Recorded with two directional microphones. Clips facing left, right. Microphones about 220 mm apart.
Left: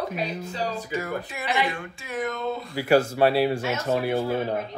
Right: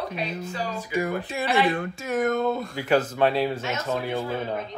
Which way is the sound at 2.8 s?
10° left (ahead or behind).